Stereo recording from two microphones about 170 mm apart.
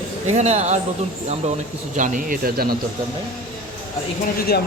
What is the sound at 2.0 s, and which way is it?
Speech, 55° right (ahead or behind).